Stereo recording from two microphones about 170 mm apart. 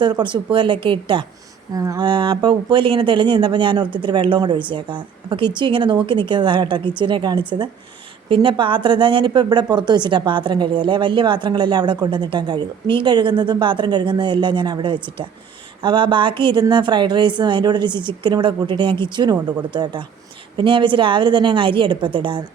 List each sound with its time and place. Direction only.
0.0 s a woman's voice: 30° right (ahead or behind)